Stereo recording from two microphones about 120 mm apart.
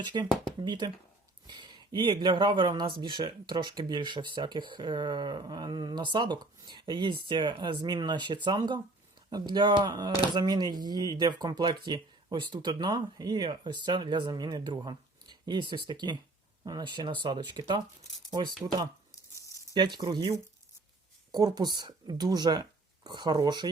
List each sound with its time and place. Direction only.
0.0 s speech: 40° right (ahead or behind)
19.7 s speech: 40° right (ahead or behind)